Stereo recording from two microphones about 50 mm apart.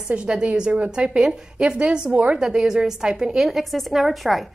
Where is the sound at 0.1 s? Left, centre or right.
Right.